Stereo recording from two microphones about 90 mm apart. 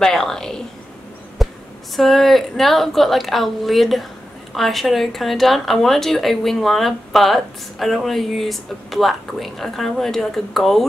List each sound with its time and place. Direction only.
0.0 s speech: 5° left (ahead or behind)
1.4 s a sound: centre (ahead or behind)
2.0 s speech: centre (ahead or behind)